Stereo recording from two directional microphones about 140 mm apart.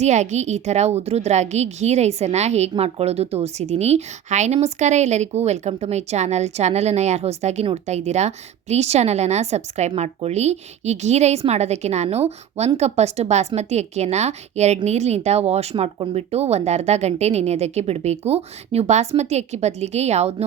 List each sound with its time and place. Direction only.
0.0 s a woman's voice: 55° right (ahead or behind)